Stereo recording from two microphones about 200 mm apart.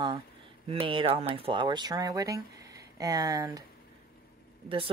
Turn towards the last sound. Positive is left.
turn(degrees=-30)  # may be behind; listen again after turning